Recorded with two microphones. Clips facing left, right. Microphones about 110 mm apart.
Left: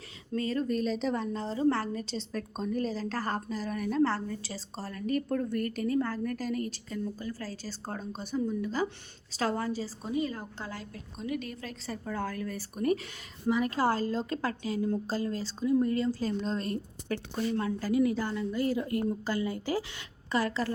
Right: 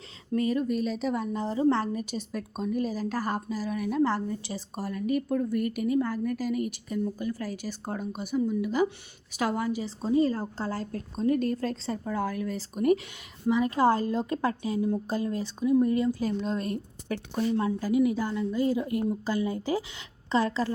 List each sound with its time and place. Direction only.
0.3 s a woman's voice: 20° right (ahead or behind)
0.7 s a woman's voice: 5° right (ahead or behind)
10.0 s a woman's voice: 35° right (ahead or behind)
12.0 s a woman's voice: 15° right (ahead or behind)